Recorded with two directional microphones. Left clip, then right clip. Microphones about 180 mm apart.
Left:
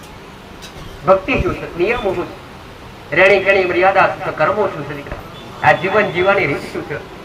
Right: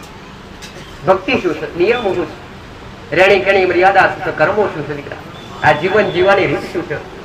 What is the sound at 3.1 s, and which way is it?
Speech, 30° left (ahead or behind).